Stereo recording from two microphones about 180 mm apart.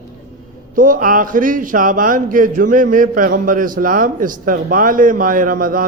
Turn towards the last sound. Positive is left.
turn(degrees=-50)  # may be behind; listen again after turning